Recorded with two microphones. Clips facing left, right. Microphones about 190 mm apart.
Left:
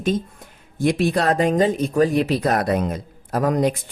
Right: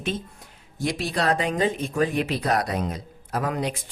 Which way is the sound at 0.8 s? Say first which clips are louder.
Left 7 dB; 55° left (ahead or behind).